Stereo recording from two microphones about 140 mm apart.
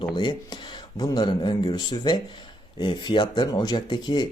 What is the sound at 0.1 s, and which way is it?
Speech, 35° left (ahead or behind).